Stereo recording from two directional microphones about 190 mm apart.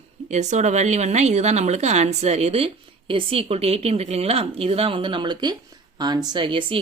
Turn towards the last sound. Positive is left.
turn(degrees=-25)  # may be behind; listen again after turning